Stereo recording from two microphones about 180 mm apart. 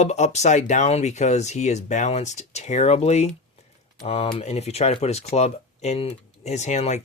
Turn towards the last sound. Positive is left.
turn(degrees=40)  # may be behind; listen again after turning